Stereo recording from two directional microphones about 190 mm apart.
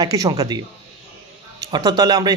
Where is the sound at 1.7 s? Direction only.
20° right (ahead or behind).